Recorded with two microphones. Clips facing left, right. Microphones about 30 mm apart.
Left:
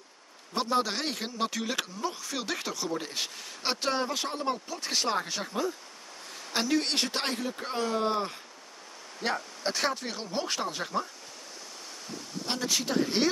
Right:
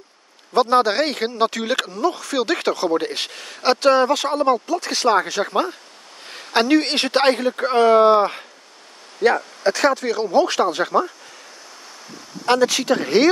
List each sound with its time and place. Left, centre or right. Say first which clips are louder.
0.6 s speech: right 12 dB; right
6.2 s speech: right 12 dB; right
9.2 s speech: right 14 dB; right
12.4 s speech: right 14 dB; right